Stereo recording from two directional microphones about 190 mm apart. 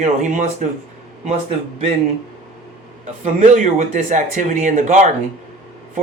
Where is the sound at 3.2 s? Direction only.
40° right (ahead or behind).